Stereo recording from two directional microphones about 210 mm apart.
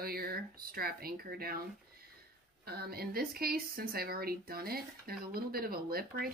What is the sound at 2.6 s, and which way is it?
Speech, 45° right (ahead or behind).